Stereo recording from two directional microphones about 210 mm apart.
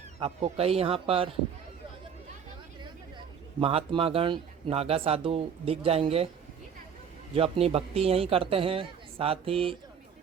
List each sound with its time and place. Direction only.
0.2 s speech: 30° right (ahead or behind)
3.6 s speech: 25° right (ahead or behind)
7.3 s speech: 25° right (ahead or behind)